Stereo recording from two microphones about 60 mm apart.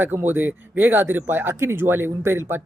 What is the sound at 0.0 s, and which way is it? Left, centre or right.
Speech, right.